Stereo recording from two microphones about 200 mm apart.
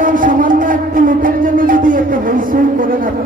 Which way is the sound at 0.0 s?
40° right (ahead or behind).